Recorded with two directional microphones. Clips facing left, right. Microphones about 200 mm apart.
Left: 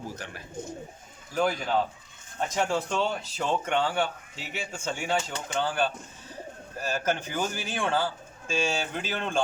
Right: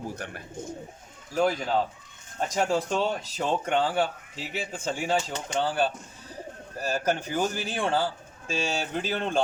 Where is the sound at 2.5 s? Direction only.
35° right (ahead or behind).